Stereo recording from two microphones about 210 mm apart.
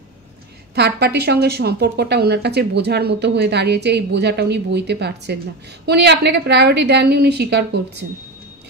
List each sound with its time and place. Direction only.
0.7 s a woman's voice: 50° right (ahead or behind)